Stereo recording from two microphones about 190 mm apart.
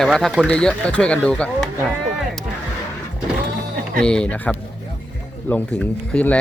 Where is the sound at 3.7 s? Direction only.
50° right (ahead or behind).